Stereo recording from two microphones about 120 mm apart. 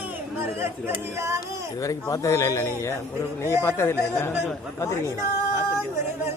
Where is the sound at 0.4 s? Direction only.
20° right (ahead or behind).